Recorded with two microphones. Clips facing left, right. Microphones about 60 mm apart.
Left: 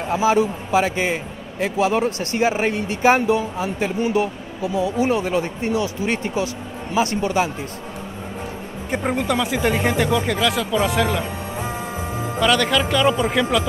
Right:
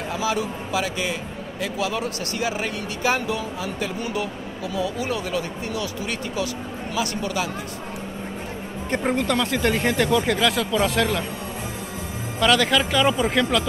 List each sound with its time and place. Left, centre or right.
0.1 s speech: left
8.9 s speech: centre
12.4 s speech: centre